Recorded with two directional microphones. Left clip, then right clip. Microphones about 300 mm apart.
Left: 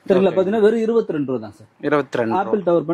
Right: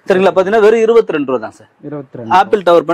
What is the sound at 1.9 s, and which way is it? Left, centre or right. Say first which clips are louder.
Speech: left 8 dB; centre.